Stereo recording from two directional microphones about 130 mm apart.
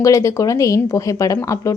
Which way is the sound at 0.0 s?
25° left (ahead or behind).